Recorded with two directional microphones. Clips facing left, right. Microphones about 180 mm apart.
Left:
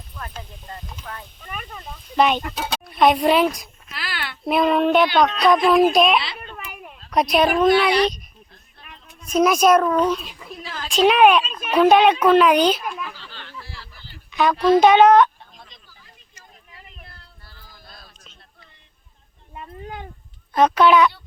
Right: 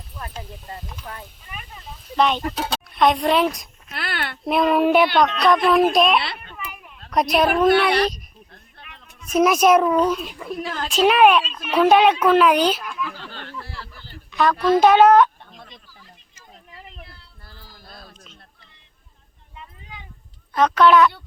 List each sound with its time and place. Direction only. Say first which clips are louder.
1.5 s speech: left 8 dB; 50° left (ahead or behind)
2.1 s speech: left 1 dB; 5° left (ahead or behind)
3.9 s a child's voice: right 3 dB; 55° right (ahead or behind)
4.4 s speech: even; centre (ahead or behind)
7.7 s a child's voice: even; 55° right (ahead or behind)
9.3 s a child's voice: even; 5° right (ahead or behind)
10.3 s a woman's voice: right 7 dB; 55° right (ahead or behind)
10.8 s speech: left 1 dB; 5° right (ahead or behind)
13.1 s a sound: right 4 dB; 50° right (ahead or behind)
14.3 s a sound: even; centre (ahead or behind)
14.8 s speech: even; 5° right (ahead or behind)
15.5 s a sound: right 4 dB; 55° right (ahead or behind)
19.5 s cat: left 8 dB; 55° left (ahead or behind)
20.5 s speech: even; 10° left (ahead or behind)